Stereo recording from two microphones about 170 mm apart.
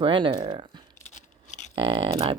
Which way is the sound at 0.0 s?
30° right (ahead or behind).